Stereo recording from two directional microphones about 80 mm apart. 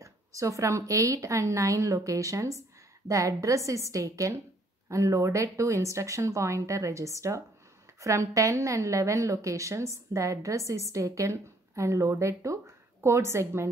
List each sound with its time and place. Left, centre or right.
0.0 s speech: right